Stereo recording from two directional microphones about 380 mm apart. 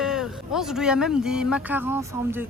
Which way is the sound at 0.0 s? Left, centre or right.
Centre.